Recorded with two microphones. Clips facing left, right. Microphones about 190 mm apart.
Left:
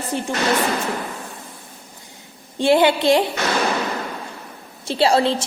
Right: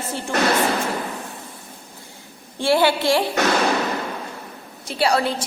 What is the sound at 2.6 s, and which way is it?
Speech, 20° left (ahead or behind).